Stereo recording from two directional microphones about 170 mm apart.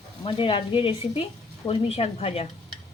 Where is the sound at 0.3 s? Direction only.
30° left (ahead or behind).